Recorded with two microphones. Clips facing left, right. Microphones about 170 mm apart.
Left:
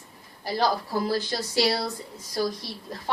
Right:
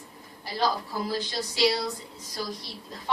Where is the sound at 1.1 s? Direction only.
50° left (ahead or behind).